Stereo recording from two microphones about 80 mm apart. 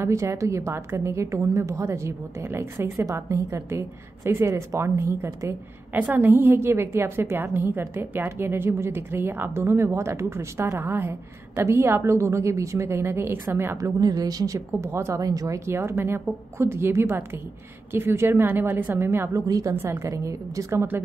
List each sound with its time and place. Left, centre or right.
0.0 s a woman's voice: right
5.9 s a woman's voice: right
13.9 s a woman's voice: right
14.8 s a woman's voice: right
15.2 s a woman's voice: right
15.7 s a woman's voice: right
18.5 s a woman's voice: right
19.3 s a woman's voice: right
19.7 s a woman's voice: right